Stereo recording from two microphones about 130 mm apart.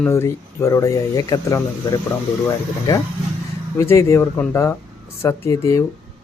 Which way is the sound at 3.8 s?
20° left (ahead or behind).